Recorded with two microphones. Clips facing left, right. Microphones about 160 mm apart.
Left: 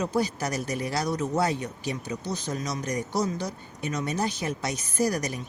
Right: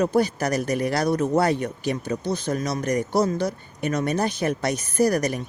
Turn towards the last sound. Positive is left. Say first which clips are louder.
# right 6 dB
turn(degrees=-60)  # may be behind; listen again after turning